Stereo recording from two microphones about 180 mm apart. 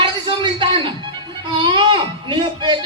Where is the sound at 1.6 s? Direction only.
25° right (ahead or behind).